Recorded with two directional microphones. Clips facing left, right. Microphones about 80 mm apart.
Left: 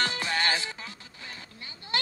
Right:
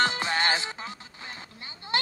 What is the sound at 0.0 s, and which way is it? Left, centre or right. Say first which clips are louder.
Music: right 3 dB; right.